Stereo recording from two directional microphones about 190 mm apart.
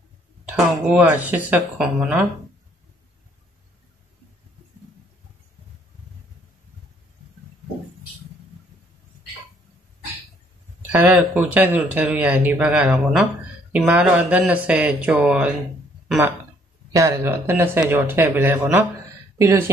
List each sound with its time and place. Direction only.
0.8 s speech: 10° right (ahead or behind)
10.9 s speech: 10° right (ahead or behind)
16.9 s speech: 15° right (ahead or behind)